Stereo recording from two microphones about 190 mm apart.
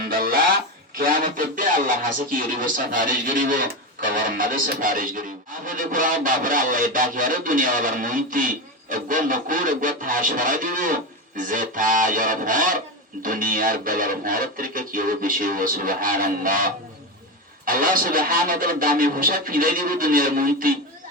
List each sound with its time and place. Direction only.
0.0 s music: 50° right (ahead or behind)
0.9 s speech: 50° right (ahead or behind)